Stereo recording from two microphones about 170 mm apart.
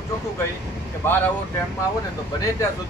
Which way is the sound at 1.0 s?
15° left (ahead or behind).